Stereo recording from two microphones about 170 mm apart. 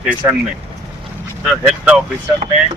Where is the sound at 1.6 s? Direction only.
5° right (ahead or behind).